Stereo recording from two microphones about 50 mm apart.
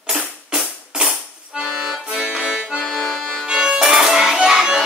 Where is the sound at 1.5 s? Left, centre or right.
Centre.